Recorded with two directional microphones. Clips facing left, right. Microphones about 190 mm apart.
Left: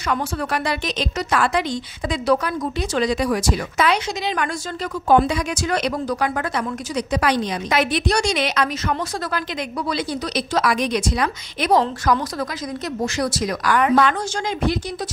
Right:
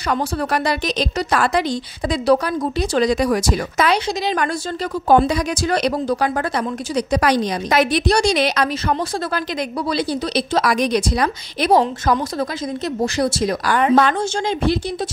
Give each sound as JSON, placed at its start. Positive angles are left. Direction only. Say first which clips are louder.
{"t": 0.1, "sound": "a woman's voice", "louder": "right 3 dB", "side_deg": -40}
{"t": 13.0, "sound": "a woman's voice", "louder": "right 4 dB", "side_deg": -30}